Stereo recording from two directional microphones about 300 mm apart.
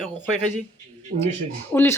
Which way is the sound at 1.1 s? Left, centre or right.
Right.